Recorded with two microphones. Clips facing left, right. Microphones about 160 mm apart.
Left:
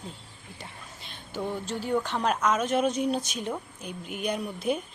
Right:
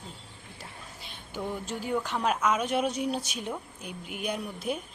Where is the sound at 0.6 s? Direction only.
10° right (ahead or behind).